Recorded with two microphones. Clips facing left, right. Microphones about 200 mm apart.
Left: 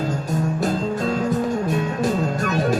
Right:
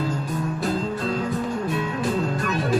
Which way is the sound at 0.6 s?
45° left (ahead or behind).